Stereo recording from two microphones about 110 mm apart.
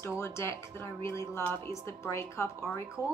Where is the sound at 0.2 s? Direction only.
25° left (ahead or behind).